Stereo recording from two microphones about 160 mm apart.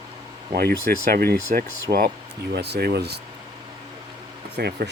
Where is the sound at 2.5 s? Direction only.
90° right.